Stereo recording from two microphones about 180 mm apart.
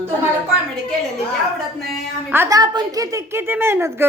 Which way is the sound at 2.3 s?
15° right (ahead or behind).